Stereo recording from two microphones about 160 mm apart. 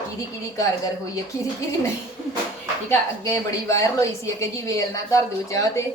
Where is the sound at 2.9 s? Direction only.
20° left (ahead or behind).